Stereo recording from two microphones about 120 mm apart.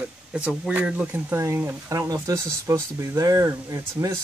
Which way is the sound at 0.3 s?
10° right (ahead or behind).